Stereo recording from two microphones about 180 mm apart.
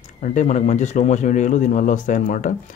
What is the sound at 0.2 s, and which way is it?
Speech, 45° left (ahead or behind).